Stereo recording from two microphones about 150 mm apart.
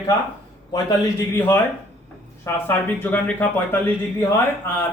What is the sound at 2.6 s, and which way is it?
Speech, 15° left (ahead or behind).